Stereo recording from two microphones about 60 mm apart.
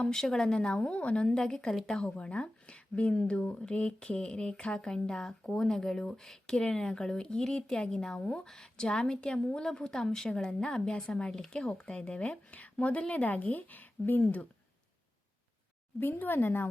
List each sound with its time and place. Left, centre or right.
0.0 s speech: centre; by 14.4 s left
16.0 s speech: left